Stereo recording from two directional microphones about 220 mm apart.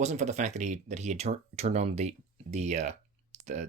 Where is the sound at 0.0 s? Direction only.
30° right (ahead or behind).